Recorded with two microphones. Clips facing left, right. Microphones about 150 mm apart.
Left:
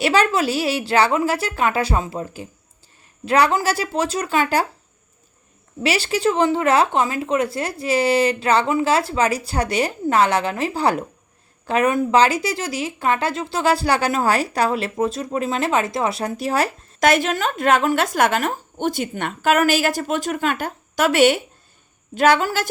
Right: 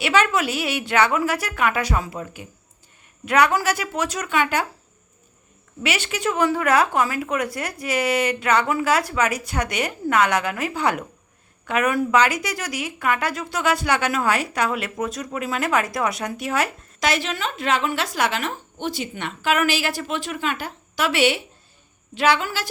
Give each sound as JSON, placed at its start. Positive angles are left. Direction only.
{"t": 0.0, "sound": "a woman's voice", "side_deg": 35}
{"t": 5.8, "sound": "speech", "side_deg": 35}
{"t": 17.0, "sound": "a woman's voice", "side_deg": 50}